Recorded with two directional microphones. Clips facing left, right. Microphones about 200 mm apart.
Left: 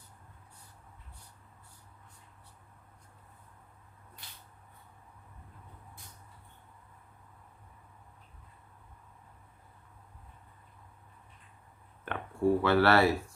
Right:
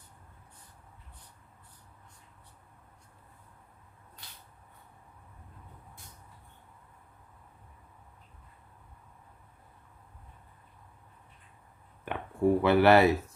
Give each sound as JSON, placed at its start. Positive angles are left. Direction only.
{"t": 12.0, "sound": "speech", "side_deg": -15}